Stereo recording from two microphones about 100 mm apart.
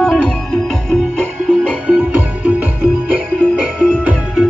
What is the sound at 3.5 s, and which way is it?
Music, 10° right (ahead or behind).